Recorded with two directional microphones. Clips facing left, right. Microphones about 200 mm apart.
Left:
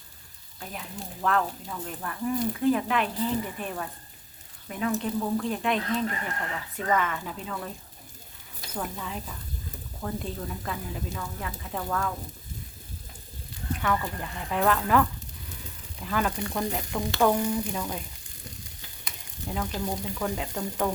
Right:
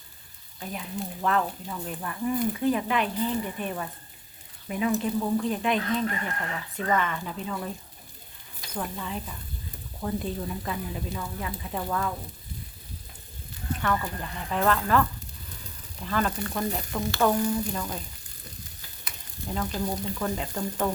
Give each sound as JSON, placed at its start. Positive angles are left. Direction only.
{"t": 0.6, "sound": "speech", "side_deg": 0}
{"t": 8.7, "sound": "speech", "side_deg": 0}
{"t": 13.8, "sound": "speech", "side_deg": 5}
{"t": 19.5, "sound": "speech", "side_deg": 10}